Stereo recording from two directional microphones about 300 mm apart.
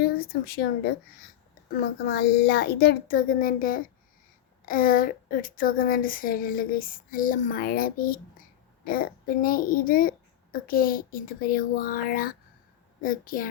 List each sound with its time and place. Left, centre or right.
0.0 s a child's voice: left